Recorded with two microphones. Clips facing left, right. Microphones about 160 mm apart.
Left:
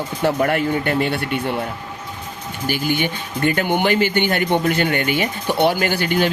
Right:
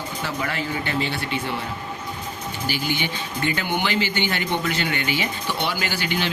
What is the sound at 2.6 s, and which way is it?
Speech, 50° left (ahead or behind).